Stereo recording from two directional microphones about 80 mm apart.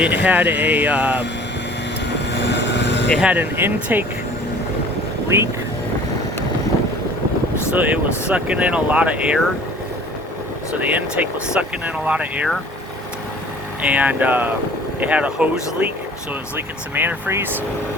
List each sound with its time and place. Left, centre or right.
0.0 s speech: centre
3.2 s speech: centre
5.3 s speech: right
7.7 s speech: centre
10.8 s speech: centre
13.8 s speech: centre
16.6 s speech: right